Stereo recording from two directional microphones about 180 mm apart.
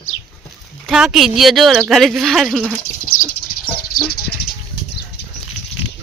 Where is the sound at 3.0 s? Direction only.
55° left (ahead or behind).